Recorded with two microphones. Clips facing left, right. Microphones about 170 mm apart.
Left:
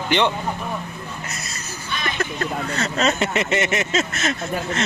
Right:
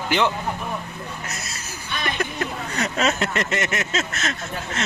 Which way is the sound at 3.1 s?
5° left (ahead or behind).